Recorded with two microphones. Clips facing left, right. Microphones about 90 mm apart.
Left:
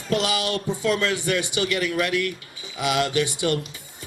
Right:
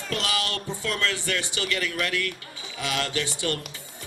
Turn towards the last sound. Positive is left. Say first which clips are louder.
# left 6 dB
turn(degrees=15)  # may be behind; listen again after turning